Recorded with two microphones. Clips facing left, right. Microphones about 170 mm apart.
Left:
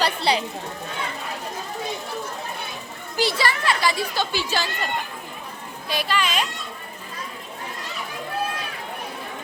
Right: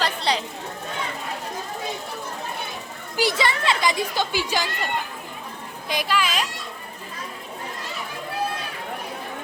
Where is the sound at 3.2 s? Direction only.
15° right (ahead or behind).